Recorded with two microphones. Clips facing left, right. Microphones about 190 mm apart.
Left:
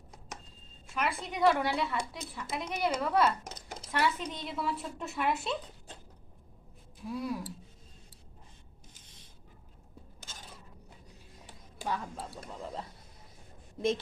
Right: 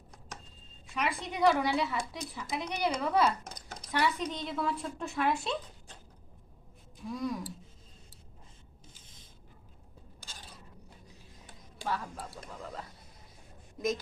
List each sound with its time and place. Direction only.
0.9 s a woman's voice: centre (ahead or behind)
7.1 s speech: 5° left (ahead or behind)
11.8 s speech: 15° left (ahead or behind)